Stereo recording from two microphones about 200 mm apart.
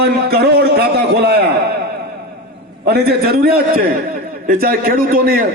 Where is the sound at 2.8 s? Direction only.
55° right (ahead or behind).